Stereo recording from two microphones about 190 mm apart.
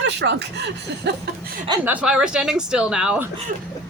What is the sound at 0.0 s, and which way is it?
Speech, 65° right (ahead or behind).